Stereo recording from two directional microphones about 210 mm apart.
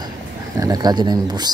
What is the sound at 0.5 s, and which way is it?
Speech, 15° right (ahead or behind).